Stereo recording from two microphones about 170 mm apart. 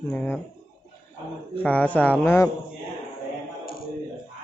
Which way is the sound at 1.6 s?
5° left (ahead or behind).